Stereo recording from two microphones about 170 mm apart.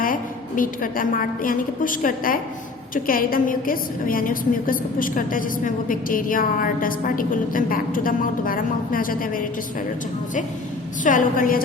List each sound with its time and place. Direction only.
0.0 s a woman's voice: 55° left (ahead or behind)
11.0 s a woman's voice: 50° left (ahead or behind)